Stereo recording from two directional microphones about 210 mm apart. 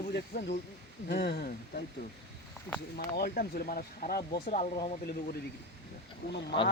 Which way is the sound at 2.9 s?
45° left (ahead or behind).